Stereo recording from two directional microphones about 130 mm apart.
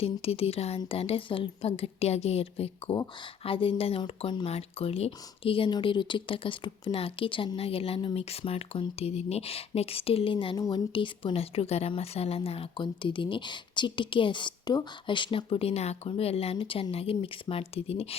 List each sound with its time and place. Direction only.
0.0 s speech: 50° left (ahead or behind)